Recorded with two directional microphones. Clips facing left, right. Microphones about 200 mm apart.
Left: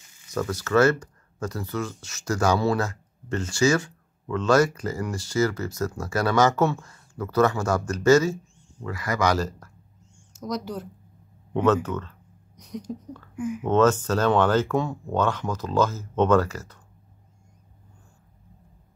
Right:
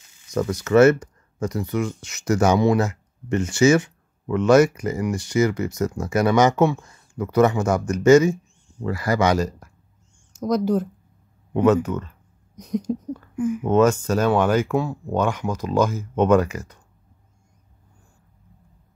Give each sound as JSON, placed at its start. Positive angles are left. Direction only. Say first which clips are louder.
{"t": 0.3, "sound": "speech", "louder": "right 5 dB", "side_deg": -20}
{"t": 8.8, "sound": "speech", "louder": "right 5 dB", "side_deg": -35}
{"t": 9.3, "sound": "speech", "louder": "right 4 dB", "side_deg": -15}
{"t": 10.4, "sound": "speech", "louder": "right 10 dB", "side_deg": -50}
{"t": 11.5, "sound": "speech", "louder": "right 4 dB", "side_deg": -10}
{"t": 12.5, "sound": "a sound", "louder": "right 10 dB", "side_deg": -45}
{"t": 13.7, "sound": "speech", "louder": "right 2 dB", "side_deg": -10}